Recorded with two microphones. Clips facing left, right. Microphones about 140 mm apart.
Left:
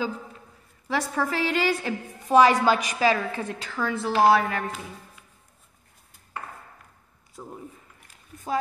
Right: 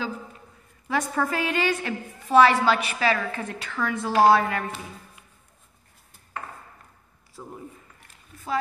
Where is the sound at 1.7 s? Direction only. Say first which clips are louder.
Left 1 dB; 10° left (ahead or behind).